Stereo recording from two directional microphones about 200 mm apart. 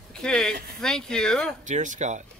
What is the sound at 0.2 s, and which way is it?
Speech, 5° left (ahead or behind).